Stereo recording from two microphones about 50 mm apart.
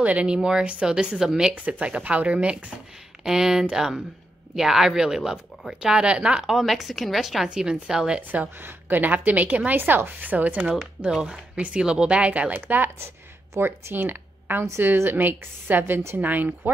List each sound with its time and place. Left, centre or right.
0.0 s speech: right
1.5 s speech: right
3.3 s speech: centre
6.4 s speech: centre
7.4 s speech: centre
8.5 s a woman's voice: right
9.8 s a woman's voice: right
11.1 s speech: centre
11.5 s speech: right
11.8 s speech: centre
12.3 s a woman's voice: right
13.5 s speech: right
13.9 s a woman's voice: right